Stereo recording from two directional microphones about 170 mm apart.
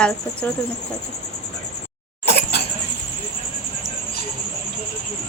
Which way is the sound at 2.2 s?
75° left (ahead or behind).